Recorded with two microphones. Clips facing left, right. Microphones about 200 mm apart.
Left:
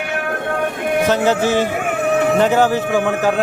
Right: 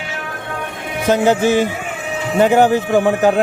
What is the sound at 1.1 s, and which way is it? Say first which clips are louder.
A man's voice: right 6 dB; 15° right (ahead or behind).